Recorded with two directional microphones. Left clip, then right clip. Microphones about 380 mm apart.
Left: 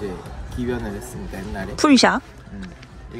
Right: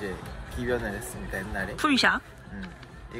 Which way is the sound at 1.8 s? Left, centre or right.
Centre.